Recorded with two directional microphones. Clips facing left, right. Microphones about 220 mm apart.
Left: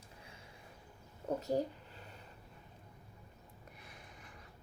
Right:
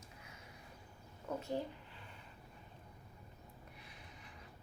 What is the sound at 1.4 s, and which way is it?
Speech, 40° left (ahead or behind).